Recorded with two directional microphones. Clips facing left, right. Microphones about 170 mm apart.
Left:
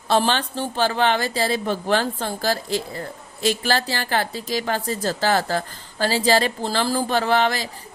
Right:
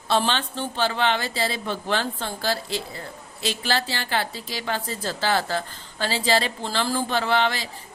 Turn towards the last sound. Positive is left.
turn(degrees=45)  # may be behind; listen again after turning